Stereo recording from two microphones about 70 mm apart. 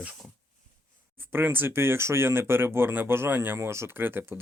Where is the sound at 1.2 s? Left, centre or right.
Right.